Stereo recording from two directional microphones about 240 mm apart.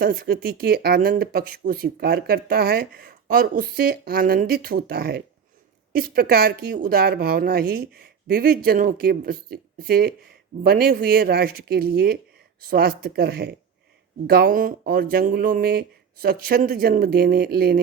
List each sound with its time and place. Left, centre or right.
0.0 s speech: right